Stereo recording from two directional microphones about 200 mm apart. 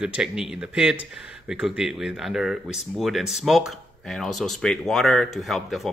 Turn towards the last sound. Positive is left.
turn(degrees=0)  # may be behind; listen again after turning